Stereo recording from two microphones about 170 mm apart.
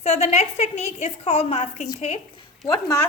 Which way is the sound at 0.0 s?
40° left (ahead or behind).